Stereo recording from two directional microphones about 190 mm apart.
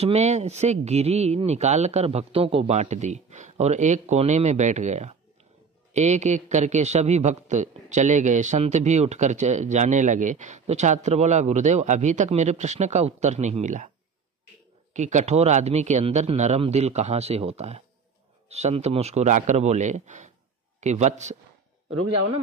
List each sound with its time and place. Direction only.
0.0 s a man's voice: 35° right (ahead or behind)
15.0 s a man's voice: 35° right (ahead or behind)